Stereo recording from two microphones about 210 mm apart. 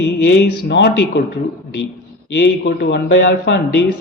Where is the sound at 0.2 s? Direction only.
55° left (ahead or behind).